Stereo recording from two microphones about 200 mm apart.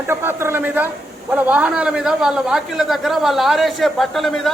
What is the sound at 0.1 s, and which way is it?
A woman's voice, 10° right (ahead or behind).